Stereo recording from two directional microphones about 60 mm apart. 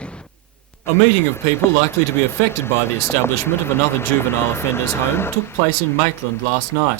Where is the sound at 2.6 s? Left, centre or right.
Left.